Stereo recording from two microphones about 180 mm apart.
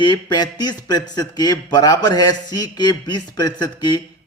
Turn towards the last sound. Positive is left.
turn(degrees=25)  # may be behind; listen again after turning